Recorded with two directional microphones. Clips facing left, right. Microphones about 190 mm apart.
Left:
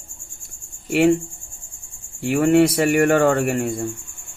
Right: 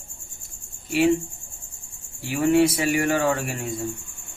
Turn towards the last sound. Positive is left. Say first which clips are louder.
# left 8 dB
turn(degrees=60)  # may be behind; listen again after turning